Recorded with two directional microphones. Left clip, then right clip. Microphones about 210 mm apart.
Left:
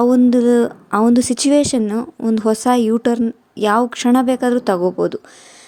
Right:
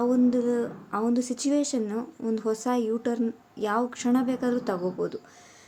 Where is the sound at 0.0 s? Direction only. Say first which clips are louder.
Left 11 dB; 45° left (ahead or behind).